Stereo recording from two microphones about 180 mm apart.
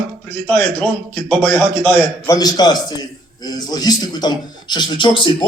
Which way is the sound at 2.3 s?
20° left (ahead or behind).